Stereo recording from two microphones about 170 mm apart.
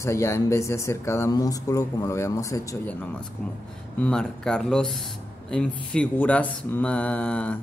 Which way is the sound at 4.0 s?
5° left (ahead or behind).